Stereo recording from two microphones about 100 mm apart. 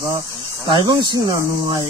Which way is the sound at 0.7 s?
45° right (ahead or behind).